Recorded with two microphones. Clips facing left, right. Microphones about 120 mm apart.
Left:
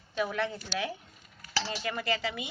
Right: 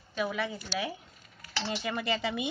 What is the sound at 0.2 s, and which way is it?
Speech, 5° right (ahead or behind).